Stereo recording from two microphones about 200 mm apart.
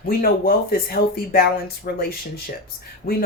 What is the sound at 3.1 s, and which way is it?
Speech, 45° left (ahead or behind).